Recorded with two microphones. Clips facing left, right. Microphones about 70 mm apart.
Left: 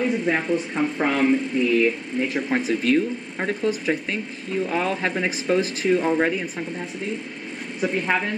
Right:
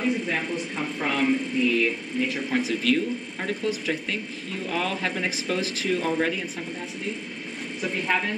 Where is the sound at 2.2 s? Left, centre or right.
Left.